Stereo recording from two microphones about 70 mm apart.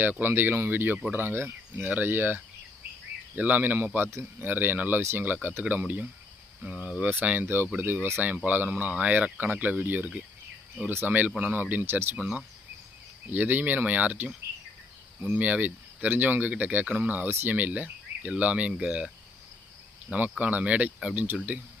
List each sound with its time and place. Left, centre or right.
0.0 s speech: right
6.7 s speech: centre
7.0 s speech: right
12.1 s speech: centre
20.4 s speech: right